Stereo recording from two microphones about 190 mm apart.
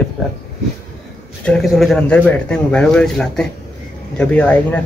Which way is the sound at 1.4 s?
Centre (ahead or behind).